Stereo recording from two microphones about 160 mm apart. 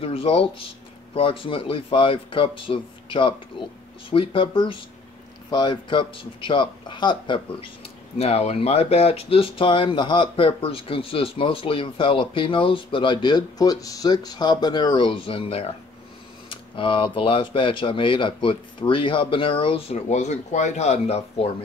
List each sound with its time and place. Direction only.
0.0 s speech: 35° left (ahead or behind)
8.2 s speech: 40° left (ahead or behind)